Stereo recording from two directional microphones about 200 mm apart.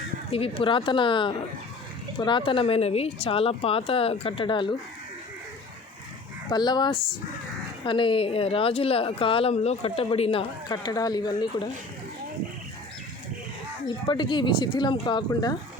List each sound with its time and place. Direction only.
0.3 s speech: 30° left (ahead or behind)
6.5 s speech: 20° left (ahead or behind)
13.8 s speech: 20° left (ahead or behind)